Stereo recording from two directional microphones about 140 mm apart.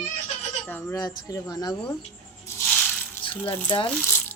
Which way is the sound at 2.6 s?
5° left (ahead or behind).